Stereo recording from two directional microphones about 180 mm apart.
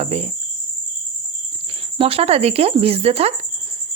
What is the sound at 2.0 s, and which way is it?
Speech, 35° right (ahead or behind).